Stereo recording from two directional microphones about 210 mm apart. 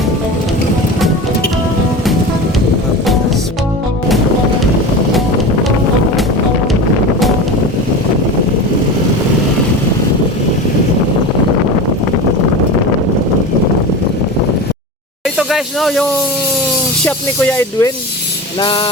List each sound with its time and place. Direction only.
15.4 s snake: centre (ahead or behind)
17.1 s speech: 10° left (ahead or behind)
18.6 s music: 25° left (ahead or behind)